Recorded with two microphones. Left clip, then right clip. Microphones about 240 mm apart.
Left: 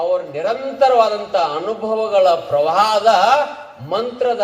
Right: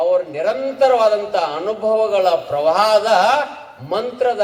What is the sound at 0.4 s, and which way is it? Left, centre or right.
A man's voice, right.